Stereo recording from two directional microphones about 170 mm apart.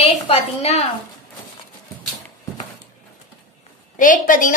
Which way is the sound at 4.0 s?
50° left (ahead or behind).